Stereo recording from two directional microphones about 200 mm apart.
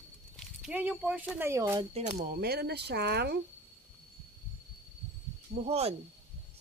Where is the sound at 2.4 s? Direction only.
50° right (ahead or behind).